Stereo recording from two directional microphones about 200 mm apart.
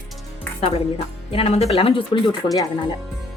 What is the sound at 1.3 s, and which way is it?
Speech, 30° left (ahead or behind).